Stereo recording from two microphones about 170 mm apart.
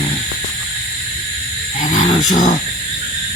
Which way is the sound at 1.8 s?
50° left (ahead or behind).